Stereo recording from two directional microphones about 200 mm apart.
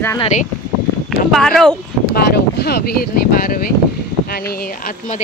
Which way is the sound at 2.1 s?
50° left (ahead or behind).